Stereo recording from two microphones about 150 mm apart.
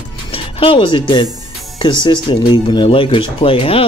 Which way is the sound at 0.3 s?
35° left (ahead or behind).